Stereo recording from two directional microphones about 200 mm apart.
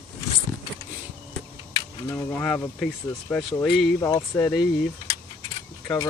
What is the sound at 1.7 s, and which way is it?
Speech, 15° left (ahead or behind).